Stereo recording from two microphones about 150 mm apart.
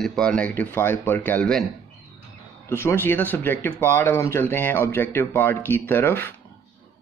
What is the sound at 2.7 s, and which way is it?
Speech, 15° left (ahead or behind).